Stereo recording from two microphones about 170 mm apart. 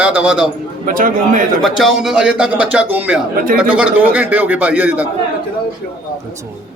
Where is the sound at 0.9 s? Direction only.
55° right (ahead or behind).